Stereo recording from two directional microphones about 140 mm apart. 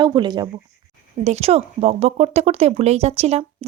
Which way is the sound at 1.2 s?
50° right (ahead or behind).